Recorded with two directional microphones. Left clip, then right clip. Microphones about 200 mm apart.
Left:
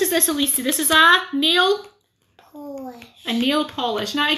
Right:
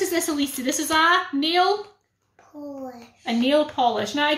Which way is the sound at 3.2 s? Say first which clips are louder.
Right 1 dB; 10° right (ahead or behind).